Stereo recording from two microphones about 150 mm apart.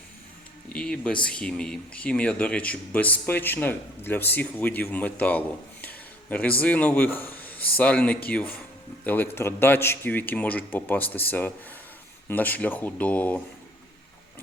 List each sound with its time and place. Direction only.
0.7 s a man's voice: 5° left (ahead or behind)